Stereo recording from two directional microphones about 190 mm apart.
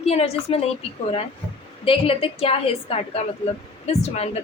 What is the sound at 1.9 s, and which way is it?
A woman's voice, 30° left (ahead or behind).